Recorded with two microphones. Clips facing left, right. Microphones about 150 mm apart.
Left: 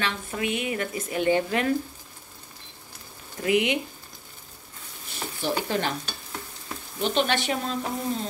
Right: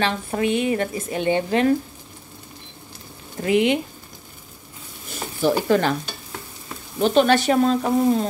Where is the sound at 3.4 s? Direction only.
30° right (ahead or behind).